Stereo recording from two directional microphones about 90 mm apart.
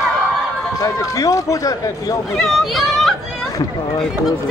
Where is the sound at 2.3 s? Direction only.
5° left (ahead or behind).